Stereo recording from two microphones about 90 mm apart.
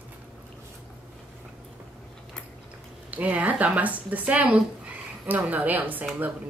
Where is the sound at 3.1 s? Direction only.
15° right (ahead or behind).